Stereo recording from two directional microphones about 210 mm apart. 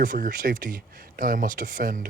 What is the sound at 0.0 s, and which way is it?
Speech, 40° right (ahead or behind).